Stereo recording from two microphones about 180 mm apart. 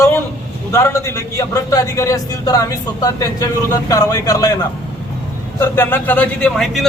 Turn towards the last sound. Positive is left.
turn(degrees=5)  # may be behind; listen again after turning